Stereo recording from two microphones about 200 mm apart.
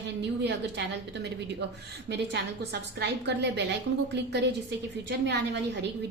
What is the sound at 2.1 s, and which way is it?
A woman's voice, 55° right (ahead or behind).